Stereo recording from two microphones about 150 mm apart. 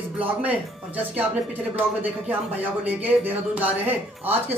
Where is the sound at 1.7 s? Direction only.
10° right (ahead or behind).